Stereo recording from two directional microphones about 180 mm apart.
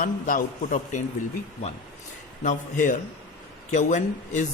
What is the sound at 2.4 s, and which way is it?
A man's voice, 45° left (ahead or behind).